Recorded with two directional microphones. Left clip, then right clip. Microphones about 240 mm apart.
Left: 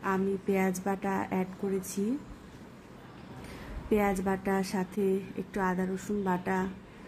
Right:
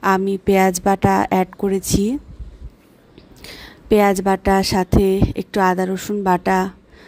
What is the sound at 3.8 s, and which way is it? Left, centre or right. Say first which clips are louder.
A woman's voice: right 14 dB; right.